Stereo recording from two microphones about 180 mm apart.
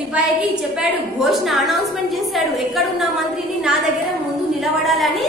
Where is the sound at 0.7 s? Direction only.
Centre (ahead or behind).